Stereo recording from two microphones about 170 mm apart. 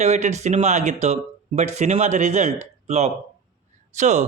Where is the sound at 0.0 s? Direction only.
40° right (ahead or behind).